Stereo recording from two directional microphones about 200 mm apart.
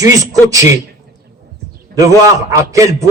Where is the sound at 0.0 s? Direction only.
15° right (ahead or behind).